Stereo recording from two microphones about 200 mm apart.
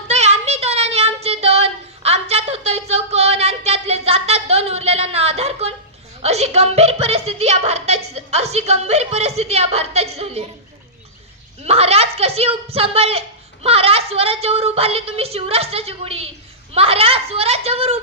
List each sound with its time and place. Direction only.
0.1 s child singing: 30° right (ahead or behind)
6.2 s speech: 30° right (ahead or behind)
11.6 s a woman's voice: 30° right (ahead or behind)